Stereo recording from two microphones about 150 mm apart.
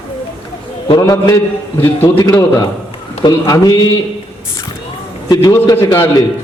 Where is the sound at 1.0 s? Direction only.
25° left (ahead or behind).